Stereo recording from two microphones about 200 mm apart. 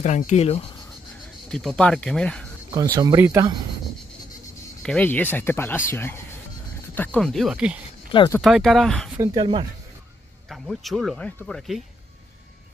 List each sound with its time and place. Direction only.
0.0 s speech: 35° left (ahead or behind)
1.5 s speech: centre (ahead or behind)
2.7 s speech: 20° right (ahead or behind)
4.8 s speech: 5° left (ahead or behind)
7.0 s speech: 5° left (ahead or behind)
9.2 s speech: 25° right (ahead or behind)
10.5 s speech: centre (ahead or behind)